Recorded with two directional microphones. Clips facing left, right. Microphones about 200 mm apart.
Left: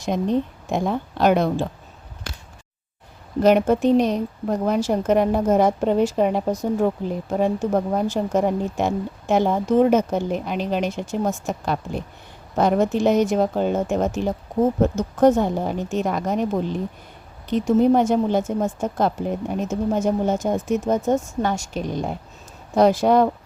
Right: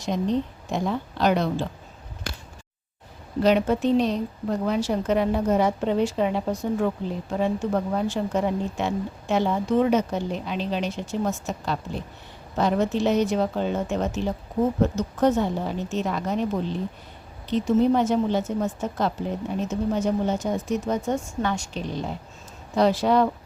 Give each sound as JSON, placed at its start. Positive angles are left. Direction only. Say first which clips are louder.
{"t": 0.0, "sound": "a woman's voice", "louder": "left 3 dB", "side_deg": 50}
{"t": 3.4, "sound": "a woman's voice", "louder": "left 4 dB", "side_deg": 50}